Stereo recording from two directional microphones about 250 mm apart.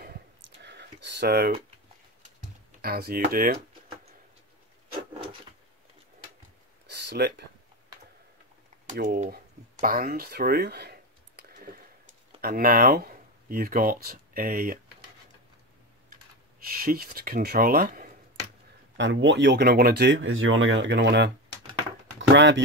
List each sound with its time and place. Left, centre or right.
0.0 s a sound: right
2.8 s speech: right
6.9 s a sound: right
8.8 s speech: right
16.7 s speech: right
18.9 s speech: right
22.3 s speech: right